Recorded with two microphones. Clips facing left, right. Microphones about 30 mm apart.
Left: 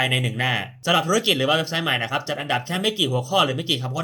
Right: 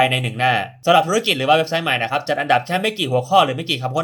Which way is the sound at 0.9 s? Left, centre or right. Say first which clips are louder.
Right 6 dB; centre.